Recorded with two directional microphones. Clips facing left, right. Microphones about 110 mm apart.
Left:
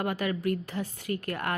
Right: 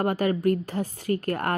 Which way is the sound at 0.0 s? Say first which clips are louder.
Right 6 dB; 40° right (ahead or behind).